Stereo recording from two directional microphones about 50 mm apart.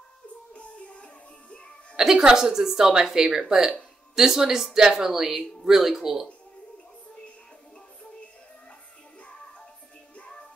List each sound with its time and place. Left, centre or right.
0.6 s music: left
2.0 s a woman's voice: centre
10.1 s music: centre